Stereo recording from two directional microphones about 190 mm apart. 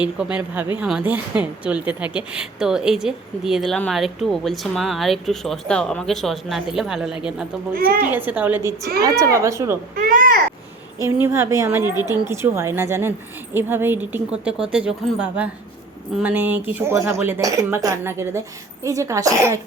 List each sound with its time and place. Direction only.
0.0 s a woman's voice: 5° right (ahead or behind)
7.7 s a child's voice: 50° right (ahead or behind)
8.1 s speech: 10° right (ahead or behind)
9.9 s a child's voice: 45° right (ahead or behind)
11.0 s speech: 15° right (ahead or behind)